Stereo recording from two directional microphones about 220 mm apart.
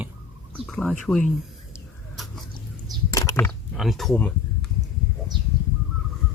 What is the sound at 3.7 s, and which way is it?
Speech, centre (ahead or behind).